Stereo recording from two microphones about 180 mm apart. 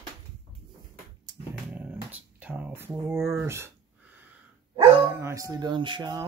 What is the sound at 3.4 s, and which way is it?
Speech, 15° right (ahead or behind).